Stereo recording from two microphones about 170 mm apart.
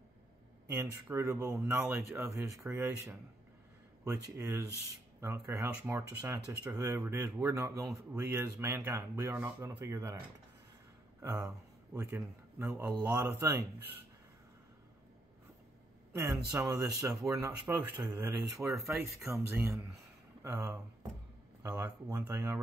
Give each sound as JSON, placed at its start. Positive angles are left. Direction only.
{"t": 0.7, "sound": "speech", "side_deg": -10}
{"t": 12.2, "sound": "a man's voice", "side_deg": -5}
{"t": 16.1, "sound": "speech", "side_deg": -20}
{"t": 20.4, "sound": "speech", "side_deg": -20}